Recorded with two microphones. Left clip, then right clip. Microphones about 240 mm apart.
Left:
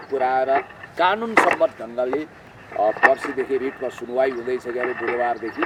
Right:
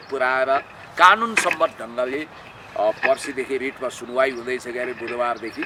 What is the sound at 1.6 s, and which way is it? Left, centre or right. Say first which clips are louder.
Speech: left 1 dB; right.